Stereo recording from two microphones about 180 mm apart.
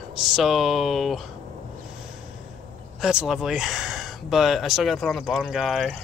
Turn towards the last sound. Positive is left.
turn(degrees=0)  # may be behind; listen again after turning